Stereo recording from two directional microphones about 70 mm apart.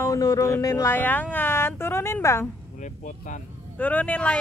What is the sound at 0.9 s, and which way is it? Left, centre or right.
A woman's voice, left.